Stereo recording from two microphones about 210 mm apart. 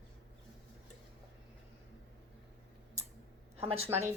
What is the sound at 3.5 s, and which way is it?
Speech, 30° right (ahead or behind).